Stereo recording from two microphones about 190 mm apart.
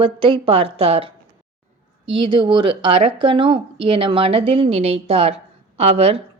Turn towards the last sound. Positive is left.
turn(degrees=-30)  # may be behind; listen again after turning